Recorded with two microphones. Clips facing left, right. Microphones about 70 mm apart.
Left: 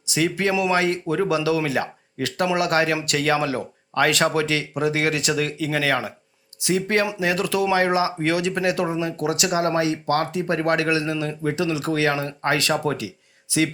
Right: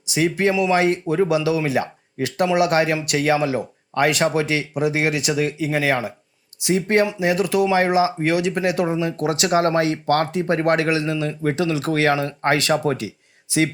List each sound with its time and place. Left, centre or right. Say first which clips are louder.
0.1 s speech: right 3 dB; right
9.5 s speech: right 4 dB; right